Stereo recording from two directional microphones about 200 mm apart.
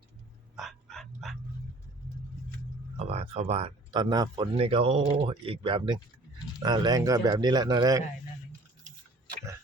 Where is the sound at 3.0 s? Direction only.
30° right (ahead or behind).